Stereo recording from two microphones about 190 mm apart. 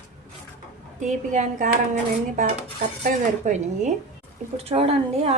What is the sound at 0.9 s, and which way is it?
A woman's voice, 40° right (ahead or behind).